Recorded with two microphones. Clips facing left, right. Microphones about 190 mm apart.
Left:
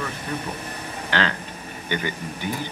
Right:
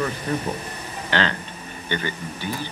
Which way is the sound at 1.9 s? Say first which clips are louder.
Even; 15° left (ahead or behind).